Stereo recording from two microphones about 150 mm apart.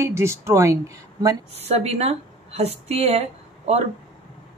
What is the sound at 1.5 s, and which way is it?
Speech, 45° right (ahead or behind).